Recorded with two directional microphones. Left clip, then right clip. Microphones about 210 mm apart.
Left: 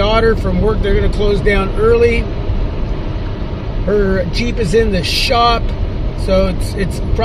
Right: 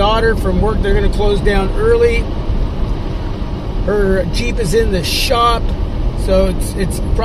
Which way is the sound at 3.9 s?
20° left (ahead or behind).